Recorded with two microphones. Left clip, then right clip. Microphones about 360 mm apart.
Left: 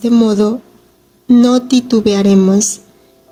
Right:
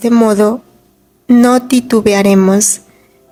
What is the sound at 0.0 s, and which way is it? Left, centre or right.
A woman's voice, right.